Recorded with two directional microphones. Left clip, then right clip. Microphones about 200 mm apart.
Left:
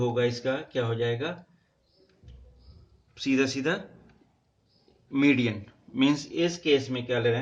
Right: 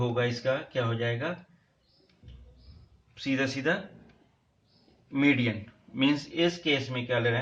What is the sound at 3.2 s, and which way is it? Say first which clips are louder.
Speech: left 2 dB; 45° left (ahead or behind).